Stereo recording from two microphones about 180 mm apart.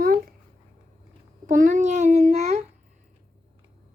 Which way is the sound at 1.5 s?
45° right (ahead or behind).